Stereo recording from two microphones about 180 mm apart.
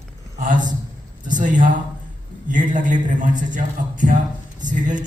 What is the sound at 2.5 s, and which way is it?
A man's voice, 45° right (ahead or behind).